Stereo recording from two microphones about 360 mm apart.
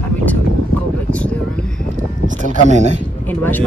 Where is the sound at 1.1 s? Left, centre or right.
Centre.